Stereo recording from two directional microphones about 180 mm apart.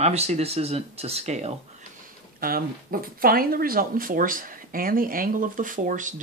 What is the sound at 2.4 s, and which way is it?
Speech, 55° right (ahead or behind).